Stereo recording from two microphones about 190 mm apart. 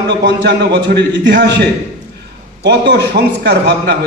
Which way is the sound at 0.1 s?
70° right (ahead or behind).